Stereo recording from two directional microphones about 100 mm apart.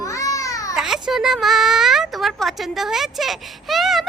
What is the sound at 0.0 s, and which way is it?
Babbling, 30° left (ahead or behind).